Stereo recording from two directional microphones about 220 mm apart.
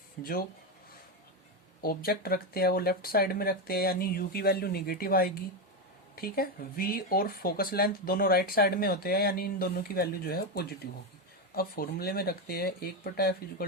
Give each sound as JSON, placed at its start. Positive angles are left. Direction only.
{"t": 0.2, "sound": "speech", "side_deg": 40}
{"t": 1.8, "sound": "speech", "side_deg": 45}